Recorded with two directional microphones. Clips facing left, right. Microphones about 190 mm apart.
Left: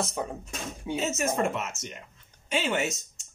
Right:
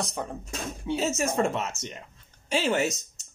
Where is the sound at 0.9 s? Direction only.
35° right (ahead or behind).